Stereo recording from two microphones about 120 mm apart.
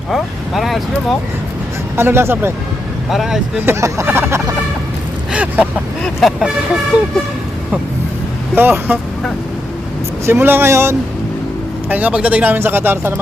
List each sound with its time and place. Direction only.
0.1 s speech: centre (ahead or behind)
2.0 s speech: 20° right (ahead or behind)
3.1 s speech: centre (ahead or behind)
3.7 s speech: 25° right (ahead or behind)
6.1 s speech: centre (ahead or behind)
6.9 s speech: 10° right (ahead or behind)
8.5 s speech: 15° right (ahead or behind)
10.2 s speech: 20° right (ahead or behind)